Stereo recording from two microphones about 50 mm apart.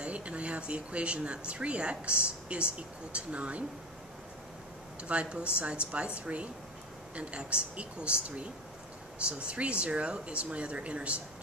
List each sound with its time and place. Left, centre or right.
0.0 s speech: right
5.0 s speech: right